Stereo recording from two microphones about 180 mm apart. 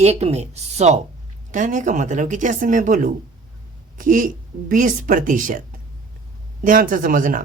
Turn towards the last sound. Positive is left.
turn(degrees=-50)  # may be behind; listen again after turning